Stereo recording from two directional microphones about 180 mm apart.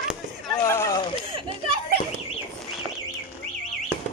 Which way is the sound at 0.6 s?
15° left (ahead or behind).